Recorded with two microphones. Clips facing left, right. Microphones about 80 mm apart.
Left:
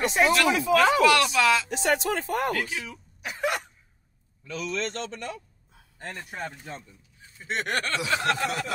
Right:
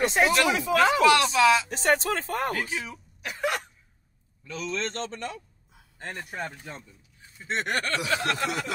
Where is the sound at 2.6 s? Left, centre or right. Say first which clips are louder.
Even; right.